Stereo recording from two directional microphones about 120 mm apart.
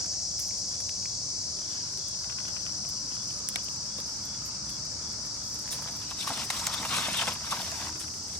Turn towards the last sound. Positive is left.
turn(degrees=10)  # may be behind; listen again after turning